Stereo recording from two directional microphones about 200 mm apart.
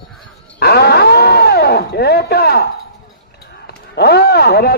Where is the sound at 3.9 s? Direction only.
55° left (ahead or behind).